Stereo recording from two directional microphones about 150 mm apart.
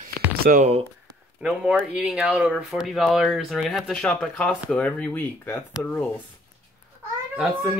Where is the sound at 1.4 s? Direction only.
5° right (ahead or behind); by 5.6 s 15° left (ahead or behind).